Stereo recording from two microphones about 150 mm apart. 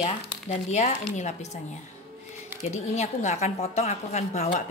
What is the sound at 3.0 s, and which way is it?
A woman's voice, 50° left (ahead or behind).